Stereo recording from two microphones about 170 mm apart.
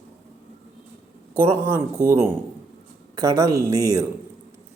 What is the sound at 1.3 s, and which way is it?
Speech, 15° right (ahead or behind).